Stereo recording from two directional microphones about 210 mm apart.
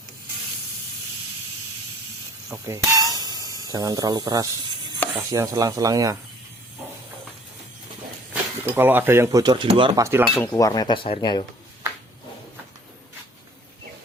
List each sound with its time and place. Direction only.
2.6 s speech: 15° right (ahead or behind)
8.3 s speech: 10° right (ahead or behind)
10.3 s speech: 15° left (ahead or behind)